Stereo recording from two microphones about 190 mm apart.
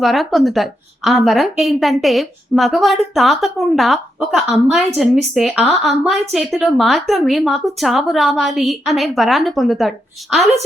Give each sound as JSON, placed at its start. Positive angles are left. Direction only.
{"t": 0.0, "sound": "a woman's voice", "side_deg": 0}